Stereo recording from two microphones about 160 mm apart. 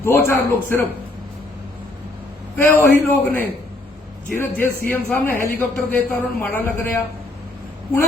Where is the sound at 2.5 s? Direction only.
15° left (ahead or behind).